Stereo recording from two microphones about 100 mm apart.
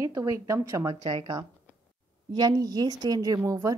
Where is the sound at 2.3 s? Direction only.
40° right (ahead or behind).